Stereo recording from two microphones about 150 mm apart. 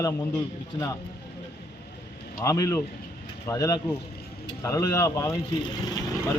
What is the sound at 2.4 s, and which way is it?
Speech, 20° left (ahead or behind).